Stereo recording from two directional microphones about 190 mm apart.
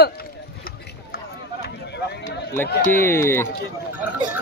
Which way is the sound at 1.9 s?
65° left (ahead or behind).